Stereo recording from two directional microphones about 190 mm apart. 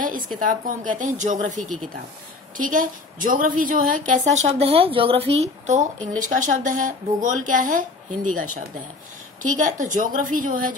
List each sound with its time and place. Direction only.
0.4 s a woman's voice: 45° right (ahead or behind)